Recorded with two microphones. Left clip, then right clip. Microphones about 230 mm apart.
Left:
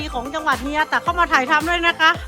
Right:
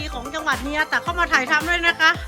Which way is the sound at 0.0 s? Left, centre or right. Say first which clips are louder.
Left 3 dB; centre.